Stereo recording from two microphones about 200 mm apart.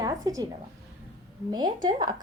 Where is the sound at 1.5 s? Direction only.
20° right (ahead or behind).